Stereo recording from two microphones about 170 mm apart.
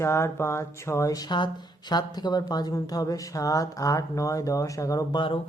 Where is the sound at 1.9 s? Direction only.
25° left (ahead or behind).